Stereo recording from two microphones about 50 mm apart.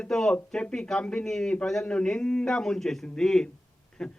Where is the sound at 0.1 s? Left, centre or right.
Centre.